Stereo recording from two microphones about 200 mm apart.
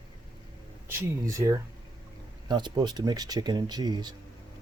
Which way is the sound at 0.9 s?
15° right (ahead or behind).